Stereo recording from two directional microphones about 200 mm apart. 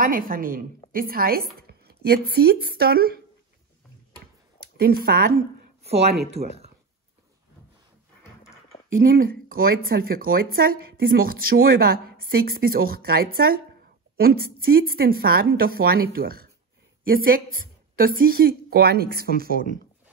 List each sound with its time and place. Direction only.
0.0 s a woman's voice: 45° right (ahead or behind)
4.7 s speech: 50° right (ahead or behind)
6.3 s speech: 30° right (ahead or behind)
9.1 s speech: 45° right (ahead or behind)